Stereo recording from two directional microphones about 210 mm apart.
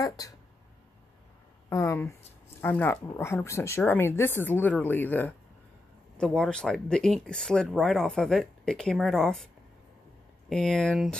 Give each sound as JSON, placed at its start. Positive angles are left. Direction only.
{"t": 0.0, "sound": "speech", "side_deg": 15}
{"t": 1.7, "sound": "speech", "side_deg": 15}
{"t": 10.5, "sound": "speech", "side_deg": 5}